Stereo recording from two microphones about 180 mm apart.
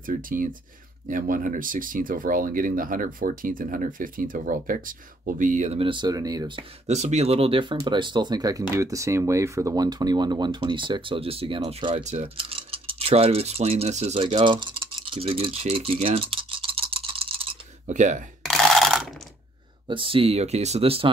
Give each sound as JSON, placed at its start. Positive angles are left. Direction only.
{"t": 0.0, "sound": "speech", "side_deg": -50}
{"t": 6.9, "sound": "speech", "side_deg": -40}
{"t": 17.9, "sound": "speech", "side_deg": -45}
{"t": 18.4, "sound": "a sound", "side_deg": 0}
{"t": 19.9, "sound": "speech", "side_deg": -30}